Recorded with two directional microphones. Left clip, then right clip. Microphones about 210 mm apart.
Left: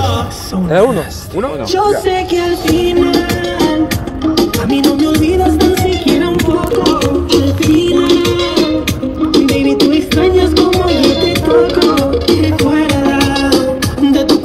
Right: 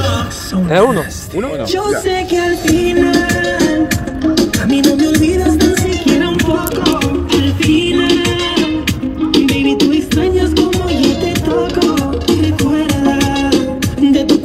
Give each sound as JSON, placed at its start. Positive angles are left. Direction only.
{"t": 0.7, "sound": "speech", "side_deg": -10}
{"t": 1.8, "sound": "music", "side_deg": -40}